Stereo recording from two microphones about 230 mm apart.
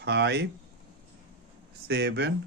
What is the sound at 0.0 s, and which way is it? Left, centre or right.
Speech, right.